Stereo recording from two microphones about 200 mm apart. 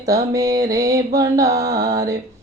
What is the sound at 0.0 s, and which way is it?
Music, 15° right (ahead or behind).